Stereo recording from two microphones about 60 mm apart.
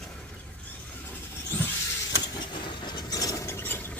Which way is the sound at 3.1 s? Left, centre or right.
Left.